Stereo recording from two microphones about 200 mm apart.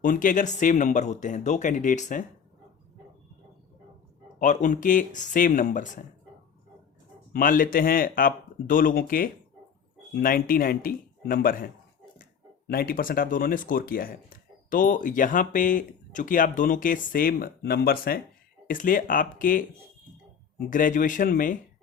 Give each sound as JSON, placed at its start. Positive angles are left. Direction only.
{"t": 0.0, "sound": "speech", "side_deg": 40}
{"t": 4.4, "sound": "speech", "side_deg": 40}
{"t": 7.3, "sound": "speech", "side_deg": 45}
{"t": 20.7, "sound": "speech", "side_deg": 40}